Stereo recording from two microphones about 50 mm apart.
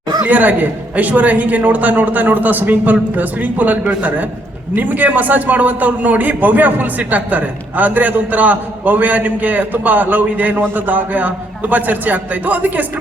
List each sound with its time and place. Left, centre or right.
0.2 s a man's voice: right